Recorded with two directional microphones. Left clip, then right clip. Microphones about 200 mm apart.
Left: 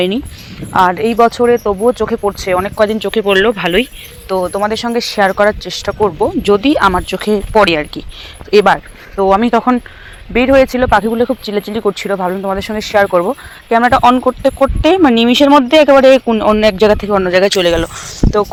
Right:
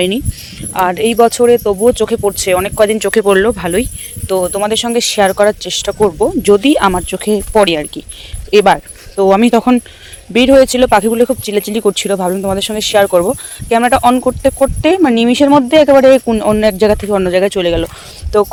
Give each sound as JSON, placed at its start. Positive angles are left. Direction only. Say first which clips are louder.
{"t": 0.7, "sound": "speech", "louder": "left 2 dB", "side_deg": -25}
{"t": 3.5, "sound": "speech", "louder": "left 2 dB", "side_deg": -10}
{"t": 4.3, "sound": "speech", "louder": "right 1 dB", "side_deg": -30}
{"t": 9.1, "sound": "speech", "louder": "right 1 dB", "side_deg": -35}
{"t": 17.3, "sound": "speech", "louder": "left 4 dB", "side_deg": -5}
{"t": 18.3, "sound": "speech", "louder": "right 2 dB", "side_deg": -30}